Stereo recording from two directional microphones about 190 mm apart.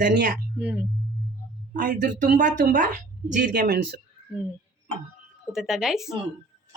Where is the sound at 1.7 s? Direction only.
45° right (ahead or behind).